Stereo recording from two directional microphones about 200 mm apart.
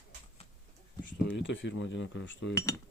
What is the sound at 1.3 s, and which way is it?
Speech, 70° left (ahead or behind).